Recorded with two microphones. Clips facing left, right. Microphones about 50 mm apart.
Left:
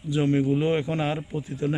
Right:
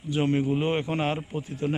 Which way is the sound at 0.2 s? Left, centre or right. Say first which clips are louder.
Left 2 dB; centre.